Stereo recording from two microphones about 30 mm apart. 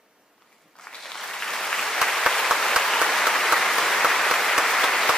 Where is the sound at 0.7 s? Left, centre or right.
Left.